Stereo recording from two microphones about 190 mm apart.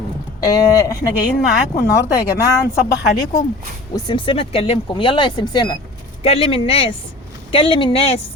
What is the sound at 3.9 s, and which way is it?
A woman's voice, 25° left (ahead or behind).